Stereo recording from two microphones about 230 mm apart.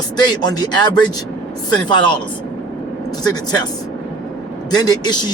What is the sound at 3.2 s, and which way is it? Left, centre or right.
Speech, centre.